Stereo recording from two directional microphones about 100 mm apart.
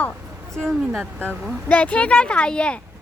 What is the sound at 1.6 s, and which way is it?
Speech, 15° left (ahead or behind).